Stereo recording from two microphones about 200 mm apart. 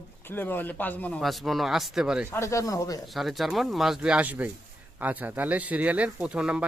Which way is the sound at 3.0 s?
Centre (ahead or behind).